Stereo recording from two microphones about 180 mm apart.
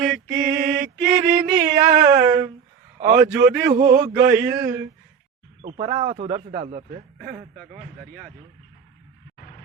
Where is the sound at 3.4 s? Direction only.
60° right (ahead or behind).